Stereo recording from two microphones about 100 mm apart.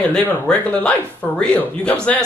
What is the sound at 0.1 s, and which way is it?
A man's voice, 10° left (ahead or behind).